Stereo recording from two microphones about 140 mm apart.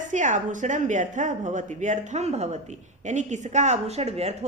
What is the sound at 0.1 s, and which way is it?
A woman's voice, 60° right (ahead or behind).